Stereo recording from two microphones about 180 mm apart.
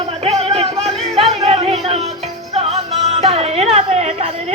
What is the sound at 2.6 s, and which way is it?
Music, 35° right (ahead or behind).